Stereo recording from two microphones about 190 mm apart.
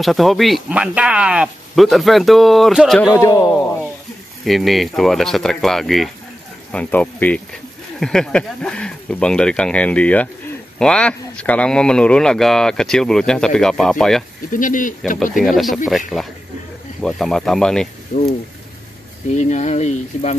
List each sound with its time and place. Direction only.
0.0 s speech: centre (ahead or behind)
3.0 s a man's voice: 15° left (ahead or behind)
4.5 s a man's voice: centre (ahead or behind)
14.5 s speech: 45° left (ahead or behind)
15.3 s speech: centre (ahead or behind)
18.1 s speech: 50° left (ahead or behind)
19.3 s speech: 40° left (ahead or behind)